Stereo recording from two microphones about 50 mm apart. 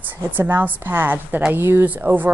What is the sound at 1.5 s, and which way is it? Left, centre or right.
Speech, right.